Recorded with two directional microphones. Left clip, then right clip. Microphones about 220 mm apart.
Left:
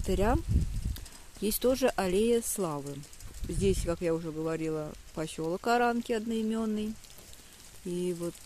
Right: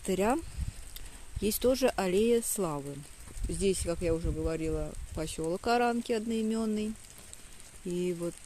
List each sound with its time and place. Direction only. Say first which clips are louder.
0.0 s speech: even; 10° right (ahead or behind)
1.4 s speech: even; centre (ahead or behind)
7.9 s speech: even; 5° right (ahead or behind)